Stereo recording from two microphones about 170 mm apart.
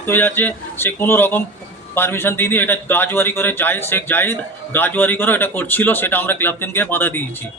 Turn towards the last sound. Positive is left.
turn(degrees=10)  # may be behind; listen again after turning